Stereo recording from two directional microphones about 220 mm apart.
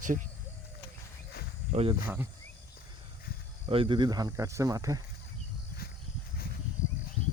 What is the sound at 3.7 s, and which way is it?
Speech, 25° right (ahead or behind).